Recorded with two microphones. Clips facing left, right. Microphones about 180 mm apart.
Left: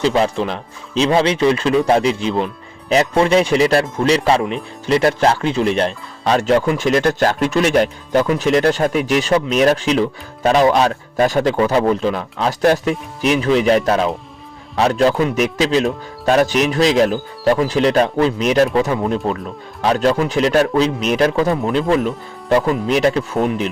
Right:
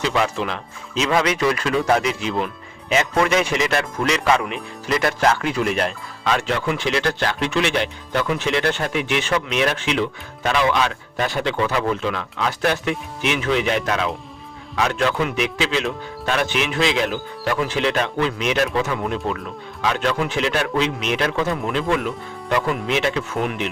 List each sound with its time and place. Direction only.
0.0 s speech: 35° left (ahead or behind)